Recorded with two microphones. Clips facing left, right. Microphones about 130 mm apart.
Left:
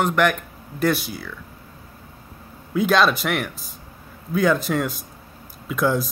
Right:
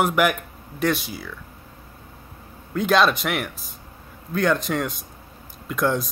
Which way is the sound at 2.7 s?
Centre (ahead or behind).